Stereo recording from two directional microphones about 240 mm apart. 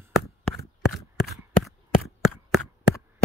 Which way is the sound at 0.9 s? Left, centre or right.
Centre.